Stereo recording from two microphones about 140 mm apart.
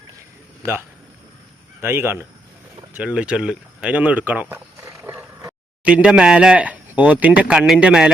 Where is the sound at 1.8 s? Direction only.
15° right (ahead or behind).